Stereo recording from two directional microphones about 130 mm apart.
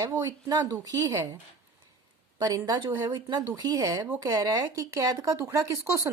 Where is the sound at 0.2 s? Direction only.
25° right (ahead or behind).